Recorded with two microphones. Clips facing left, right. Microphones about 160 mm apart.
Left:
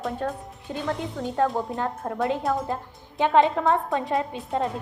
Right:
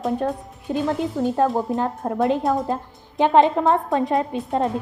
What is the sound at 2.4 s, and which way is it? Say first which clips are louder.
Speech: right 4 dB; centre (ahead or behind).